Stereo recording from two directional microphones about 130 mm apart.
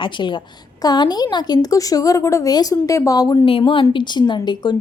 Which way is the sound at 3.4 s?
40° left (ahead or behind).